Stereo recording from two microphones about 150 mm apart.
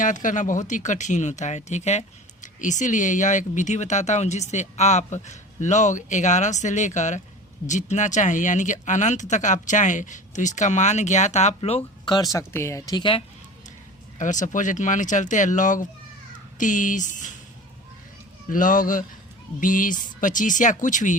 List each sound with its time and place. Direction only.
0.0 s speech: 60° left (ahead or behind)
12.0 s speech: 25° left (ahead or behind)
14.2 s speech: 55° left (ahead or behind)
18.5 s speech: 65° left (ahead or behind)